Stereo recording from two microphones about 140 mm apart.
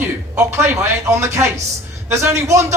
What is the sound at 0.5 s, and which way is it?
Speech, 15° right (ahead or behind).